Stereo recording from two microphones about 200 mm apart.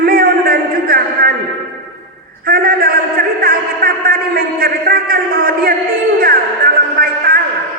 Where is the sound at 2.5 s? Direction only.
45° right (ahead or behind).